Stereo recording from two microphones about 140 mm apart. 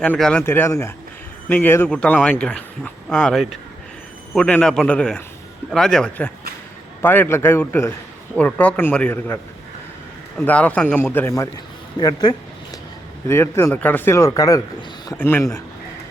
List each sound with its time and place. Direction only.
0.0 s speech: 5° left (ahead or behind)
10.4 s speech: 10° left (ahead or behind)
11.9 s speech: 30° left (ahead or behind)
13.2 s speech: 20° left (ahead or behind)
15.1 s speech: 15° left (ahead or behind)